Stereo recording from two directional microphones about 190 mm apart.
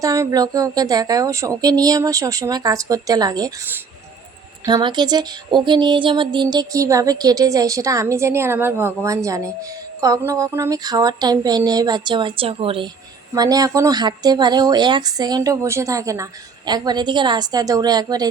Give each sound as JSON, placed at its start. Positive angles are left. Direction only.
{"t": 0.0, "sound": "a woman's voice", "side_deg": -20}
{"t": 4.6, "sound": "a woman's voice", "side_deg": -25}